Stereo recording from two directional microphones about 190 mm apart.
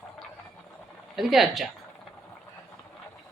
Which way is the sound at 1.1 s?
Centre (ahead or behind).